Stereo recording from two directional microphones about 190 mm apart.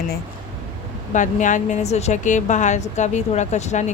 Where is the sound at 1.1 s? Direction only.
40° left (ahead or behind).